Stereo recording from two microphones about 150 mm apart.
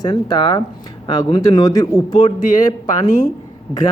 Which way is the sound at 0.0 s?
30° left (ahead or behind).